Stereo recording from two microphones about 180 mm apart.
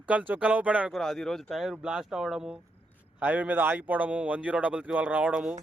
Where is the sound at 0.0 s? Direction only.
10° right (ahead or behind).